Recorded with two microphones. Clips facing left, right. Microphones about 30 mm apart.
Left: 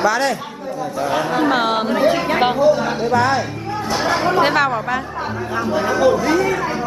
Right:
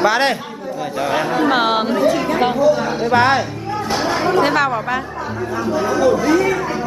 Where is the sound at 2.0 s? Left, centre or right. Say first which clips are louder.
Even; left.